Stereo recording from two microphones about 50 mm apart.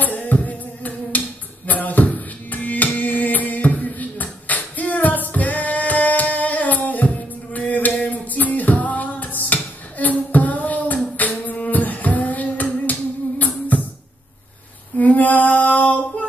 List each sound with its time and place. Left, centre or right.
0.0 s music: left
1.7 s a sound: left
13.4 s music: left
15.0 s female singing: left